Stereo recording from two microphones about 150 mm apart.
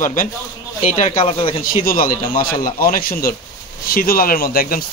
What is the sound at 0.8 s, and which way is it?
Speech, 50° left (ahead or behind).